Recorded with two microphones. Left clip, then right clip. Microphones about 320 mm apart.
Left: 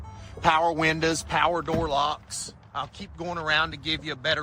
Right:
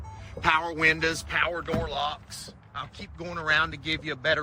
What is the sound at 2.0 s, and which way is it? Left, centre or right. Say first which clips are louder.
Speech: left 5 dB; centre.